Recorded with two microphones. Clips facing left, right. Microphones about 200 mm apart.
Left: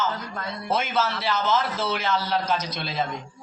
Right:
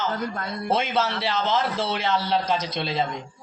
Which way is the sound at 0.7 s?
30° right (ahead or behind).